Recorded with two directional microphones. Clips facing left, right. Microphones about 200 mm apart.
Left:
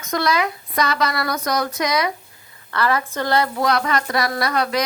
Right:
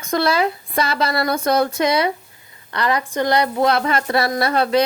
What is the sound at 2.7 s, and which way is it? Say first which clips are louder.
A woman's voice: even; 15° right (ahead or behind).